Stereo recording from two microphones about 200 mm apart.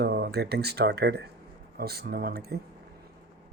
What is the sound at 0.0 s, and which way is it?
Speech, 55° right (ahead or behind).